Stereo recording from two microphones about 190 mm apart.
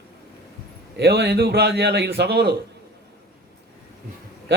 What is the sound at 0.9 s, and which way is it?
A man's voice, 60° right (ahead or behind).